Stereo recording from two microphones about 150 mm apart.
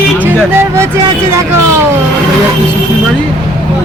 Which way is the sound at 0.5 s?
15° right (ahead or behind).